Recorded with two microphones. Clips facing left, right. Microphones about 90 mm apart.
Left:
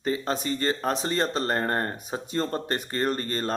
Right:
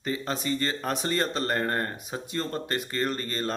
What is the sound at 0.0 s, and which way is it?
Speech, 35° left (ahead or behind).